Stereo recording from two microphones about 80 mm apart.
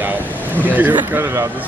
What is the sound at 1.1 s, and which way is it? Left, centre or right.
Speech, right.